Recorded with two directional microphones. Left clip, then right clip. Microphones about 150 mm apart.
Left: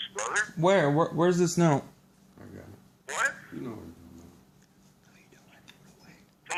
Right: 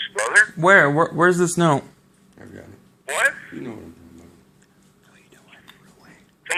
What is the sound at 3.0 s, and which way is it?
Telephone, 5° left (ahead or behind).